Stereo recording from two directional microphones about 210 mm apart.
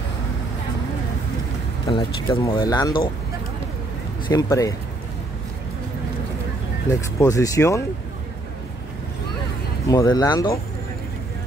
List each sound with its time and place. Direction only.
1.9 s speech: 20° left (ahead or behind)
4.3 s speech: 15° left (ahead or behind)
6.9 s speech: 15° left (ahead or behind)
9.8 s speech: 20° left (ahead or behind)